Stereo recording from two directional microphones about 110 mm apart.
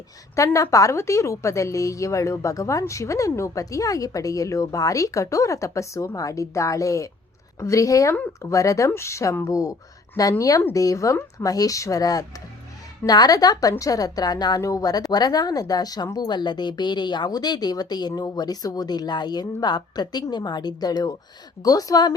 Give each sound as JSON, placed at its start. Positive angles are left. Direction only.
{"t": 0.3, "sound": "a woman's voice", "side_deg": 30}